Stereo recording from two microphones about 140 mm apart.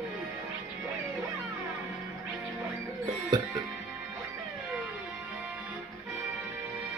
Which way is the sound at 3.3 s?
30° right (ahead or behind).